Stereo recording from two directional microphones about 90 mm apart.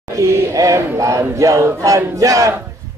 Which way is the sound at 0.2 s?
35° right (ahead or behind).